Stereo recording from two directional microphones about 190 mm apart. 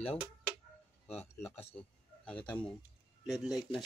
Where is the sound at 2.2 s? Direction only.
5° left (ahead or behind).